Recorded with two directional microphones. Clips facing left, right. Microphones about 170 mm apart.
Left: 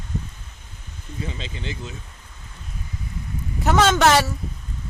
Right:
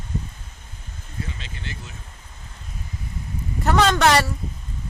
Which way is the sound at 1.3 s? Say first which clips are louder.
Left 5 dB; 20° left (ahead or behind).